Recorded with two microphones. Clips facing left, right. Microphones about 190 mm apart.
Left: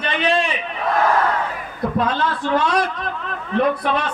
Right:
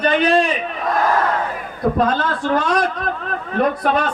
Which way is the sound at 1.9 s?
45° right (ahead or behind).